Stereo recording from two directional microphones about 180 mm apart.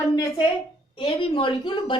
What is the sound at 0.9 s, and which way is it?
A woman's voice, 30° left (ahead or behind).